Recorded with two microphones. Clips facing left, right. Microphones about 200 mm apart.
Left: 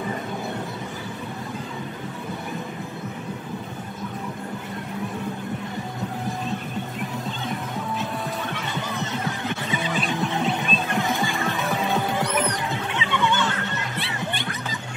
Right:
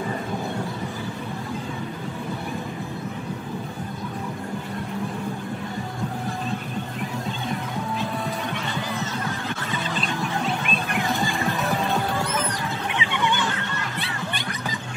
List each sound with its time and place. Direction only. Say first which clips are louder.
9.2 s music: left 1 dB; 20° left (ahead or behind)
11.3 s music: right 1 dB; centre (ahead or behind)
12.1 s music: left 2 dB; 20° left (ahead or behind)
12.9 s children playing: left 2 dB; 15° right (ahead or behind)